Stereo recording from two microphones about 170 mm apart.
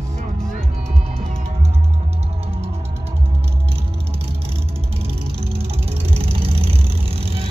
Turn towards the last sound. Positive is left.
turn(degrees=-35)  # may be behind; listen again after turning